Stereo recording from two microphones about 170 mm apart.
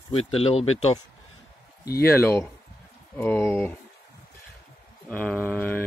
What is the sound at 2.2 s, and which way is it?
Speech, 15° left (ahead or behind).